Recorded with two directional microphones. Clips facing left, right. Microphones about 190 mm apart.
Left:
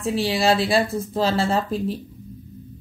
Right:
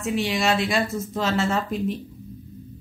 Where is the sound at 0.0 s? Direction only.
35° left (ahead or behind).